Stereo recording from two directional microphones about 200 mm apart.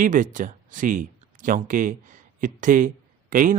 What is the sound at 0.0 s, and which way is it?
A man's voice, 40° right (ahead or behind).